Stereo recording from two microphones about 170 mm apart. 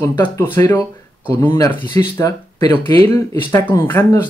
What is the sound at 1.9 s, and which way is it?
Speech, 20° left (ahead or behind).